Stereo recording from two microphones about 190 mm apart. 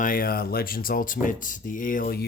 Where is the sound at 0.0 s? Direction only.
50° left (ahead or behind).